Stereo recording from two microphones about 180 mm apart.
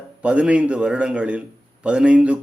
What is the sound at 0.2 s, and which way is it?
Speech, 5° right (ahead or behind).